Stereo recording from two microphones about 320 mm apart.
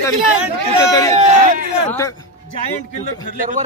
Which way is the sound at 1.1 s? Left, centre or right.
Right.